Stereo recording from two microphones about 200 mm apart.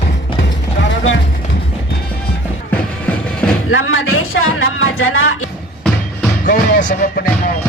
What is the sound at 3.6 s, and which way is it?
Speech, 90° left.